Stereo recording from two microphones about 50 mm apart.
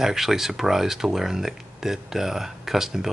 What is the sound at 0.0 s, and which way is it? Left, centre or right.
Speech, centre.